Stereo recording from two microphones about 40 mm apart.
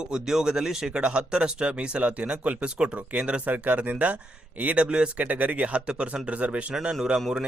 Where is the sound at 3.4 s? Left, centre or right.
Right.